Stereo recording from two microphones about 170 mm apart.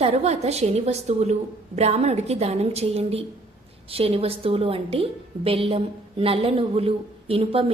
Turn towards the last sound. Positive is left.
turn(degrees=-35)  # may be behind; listen again after turning